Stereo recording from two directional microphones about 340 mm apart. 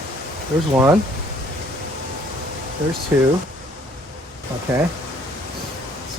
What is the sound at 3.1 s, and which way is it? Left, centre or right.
Speech, centre.